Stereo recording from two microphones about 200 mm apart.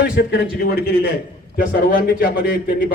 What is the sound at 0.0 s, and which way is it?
Speech, 55° left (ahead or behind).